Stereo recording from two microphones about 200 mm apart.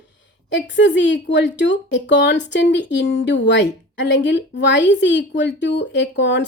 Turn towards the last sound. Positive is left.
turn(degrees=60)  # may be behind; listen again after turning